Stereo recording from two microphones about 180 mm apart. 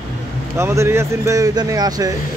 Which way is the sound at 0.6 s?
15° right (ahead or behind).